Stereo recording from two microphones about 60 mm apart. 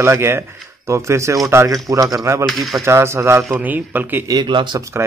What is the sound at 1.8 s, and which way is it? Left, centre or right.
Speech, right.